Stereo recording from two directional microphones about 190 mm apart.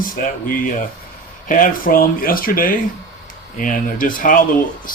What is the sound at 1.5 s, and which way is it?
Speech, 45° left (ahead or behind).